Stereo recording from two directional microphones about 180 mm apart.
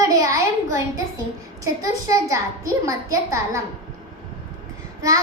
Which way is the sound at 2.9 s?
15° right (ahead or behind).